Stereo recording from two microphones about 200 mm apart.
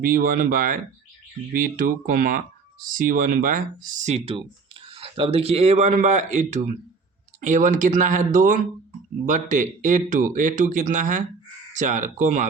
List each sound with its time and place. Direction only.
0.0 s speech: 45° right (ahead or behind)